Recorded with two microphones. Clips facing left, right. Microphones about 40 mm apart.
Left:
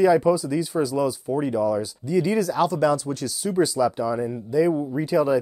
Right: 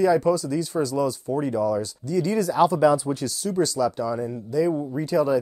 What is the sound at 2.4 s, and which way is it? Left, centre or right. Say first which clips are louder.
Speech: right 2 dB; centre.